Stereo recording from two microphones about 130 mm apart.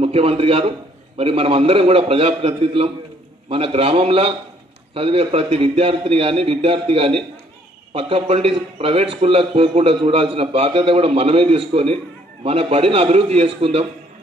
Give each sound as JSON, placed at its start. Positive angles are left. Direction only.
{"t": 0.0, "sound": "a man's voice", "side_deg": -50}